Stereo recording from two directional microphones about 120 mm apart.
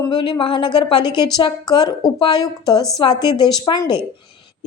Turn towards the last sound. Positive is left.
turn(degrees=35)  # may be behind; listen again after turning